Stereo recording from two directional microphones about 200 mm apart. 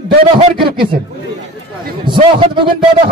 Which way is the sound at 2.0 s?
25° right (ahead or behind).